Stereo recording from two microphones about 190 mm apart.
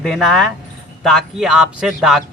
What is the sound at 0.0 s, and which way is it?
Speech, centre (ahead or behind).